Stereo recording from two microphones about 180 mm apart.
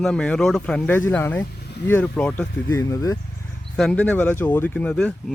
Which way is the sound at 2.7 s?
20° left (ahead or behind).